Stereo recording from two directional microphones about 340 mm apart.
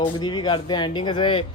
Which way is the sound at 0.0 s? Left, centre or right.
Centre.